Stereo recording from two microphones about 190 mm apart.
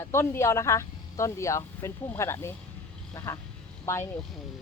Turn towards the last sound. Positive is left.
turn(degrees=15)  # may be behind; listen again after turning